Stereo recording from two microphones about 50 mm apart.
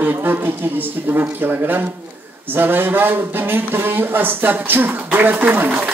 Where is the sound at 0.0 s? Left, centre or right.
Right.